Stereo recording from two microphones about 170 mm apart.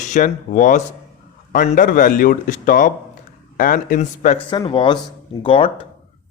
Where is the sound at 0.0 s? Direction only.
45° left (ahead or behind).